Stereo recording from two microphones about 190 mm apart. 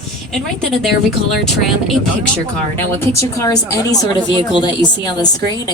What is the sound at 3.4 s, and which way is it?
Speech, 15° left (ahead or behind).